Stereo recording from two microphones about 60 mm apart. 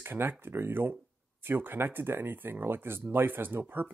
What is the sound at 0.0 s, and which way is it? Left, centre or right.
Speech, right.